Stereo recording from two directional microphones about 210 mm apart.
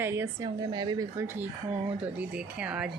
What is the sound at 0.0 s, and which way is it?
Speech, 10° right (ahead or behind).